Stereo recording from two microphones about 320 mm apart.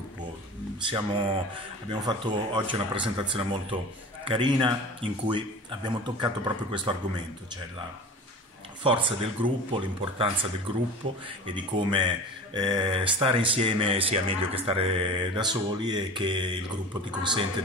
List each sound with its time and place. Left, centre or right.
0.8 s speech: centre
8.8 s speech: centre
11.5 s speech: centre